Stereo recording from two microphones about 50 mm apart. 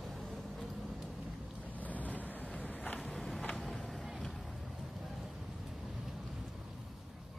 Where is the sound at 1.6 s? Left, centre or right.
Left.